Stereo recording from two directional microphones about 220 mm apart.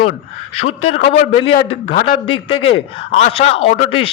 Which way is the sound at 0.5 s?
30° left (ahead or behind).